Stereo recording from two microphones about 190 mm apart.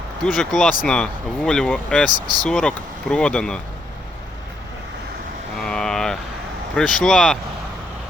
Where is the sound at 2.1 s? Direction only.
20° right (ahead or behind).